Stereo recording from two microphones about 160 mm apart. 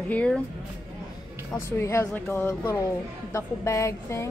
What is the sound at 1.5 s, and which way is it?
Speech, 15° left (ahead or behind).